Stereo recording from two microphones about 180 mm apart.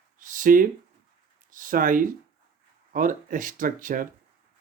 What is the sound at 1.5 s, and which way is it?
Speech, 50° right (ahead or behind).